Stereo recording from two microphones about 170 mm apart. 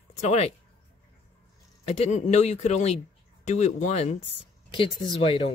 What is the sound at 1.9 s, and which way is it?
Speech, 40° left (ahead or behind).